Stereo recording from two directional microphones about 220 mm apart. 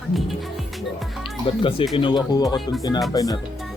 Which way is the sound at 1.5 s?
25° left (ahead or behind).